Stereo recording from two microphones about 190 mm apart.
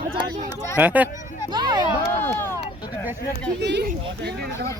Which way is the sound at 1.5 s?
20° right (ahead or behind).